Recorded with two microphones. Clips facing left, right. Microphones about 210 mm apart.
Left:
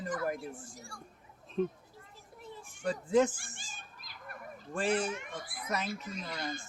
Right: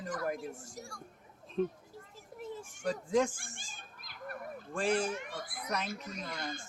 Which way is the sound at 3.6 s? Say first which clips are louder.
Left 1 dB; 50° right (ahead or behind).